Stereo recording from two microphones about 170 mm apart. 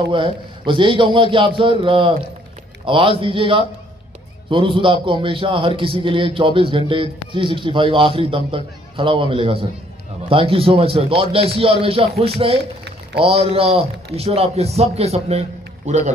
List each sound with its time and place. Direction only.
0.1 s a man's voice: 30° right (ahead or behind)